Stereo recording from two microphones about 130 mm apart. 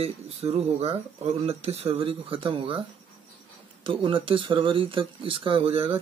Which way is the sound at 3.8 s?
40° right (ahead or behind).